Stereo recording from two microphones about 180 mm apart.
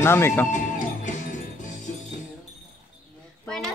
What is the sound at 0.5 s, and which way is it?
Music, 45° left (ahead or behind).